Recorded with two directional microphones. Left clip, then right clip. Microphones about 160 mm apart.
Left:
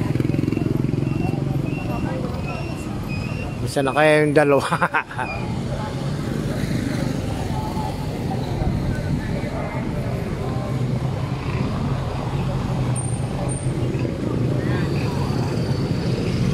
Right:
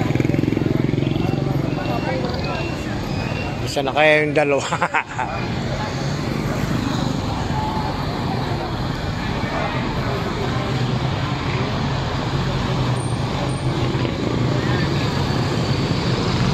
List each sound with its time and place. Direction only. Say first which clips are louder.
3.7 s speech: right 1 dB; 50° left (ahead or behind)